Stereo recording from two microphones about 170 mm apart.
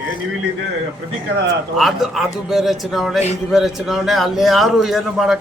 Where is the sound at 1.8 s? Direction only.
Centre (ahead or behind).